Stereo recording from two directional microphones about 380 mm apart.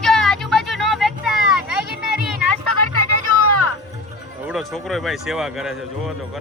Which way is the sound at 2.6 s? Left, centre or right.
Left.